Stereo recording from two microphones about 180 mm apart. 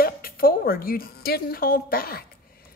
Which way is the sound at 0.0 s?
55° left (ahead or behind).